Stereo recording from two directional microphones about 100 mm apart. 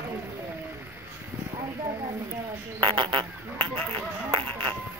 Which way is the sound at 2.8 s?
55° right (ahead or behind).